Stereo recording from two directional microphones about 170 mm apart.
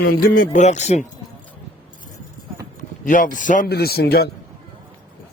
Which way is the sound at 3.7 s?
70° left (ahead or behind).